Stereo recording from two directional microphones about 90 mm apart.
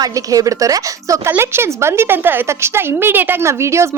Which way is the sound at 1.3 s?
25° right (ahead or behind).